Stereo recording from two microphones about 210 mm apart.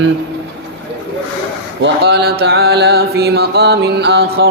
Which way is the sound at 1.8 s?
50° right (ahead or behind).